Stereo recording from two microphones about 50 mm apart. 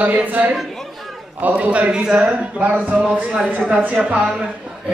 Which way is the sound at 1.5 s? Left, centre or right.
Right.